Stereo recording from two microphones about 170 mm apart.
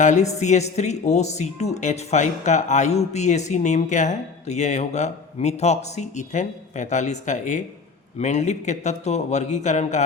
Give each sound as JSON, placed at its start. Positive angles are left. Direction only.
{"t": 0.0, "sound": "a woman's voice", "side_deg": 45}